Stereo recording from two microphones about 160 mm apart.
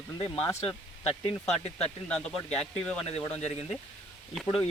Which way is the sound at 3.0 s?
40° left (ahead or behind).